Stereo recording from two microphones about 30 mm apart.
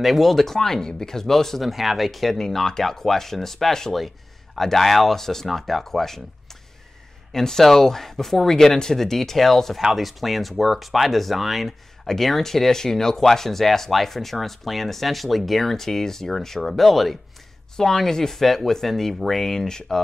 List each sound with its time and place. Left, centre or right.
0.0 s speech: centre
1.6 s speech: centre
2.3 s speech: centre
7.3 s speech: centre
9.9 s speech: centre
12.1 s speech: centre
18.4 s speech: centre